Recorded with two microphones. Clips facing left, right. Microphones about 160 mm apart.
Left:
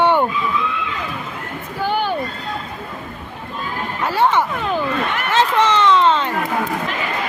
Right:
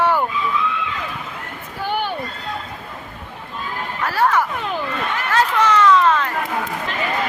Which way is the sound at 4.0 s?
25° left (ahead or behind).